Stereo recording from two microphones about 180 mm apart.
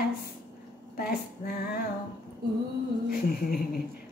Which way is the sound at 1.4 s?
60° left (ahead or behind).